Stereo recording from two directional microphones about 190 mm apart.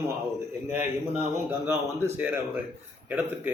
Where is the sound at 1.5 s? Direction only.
10° right (ahead or behind).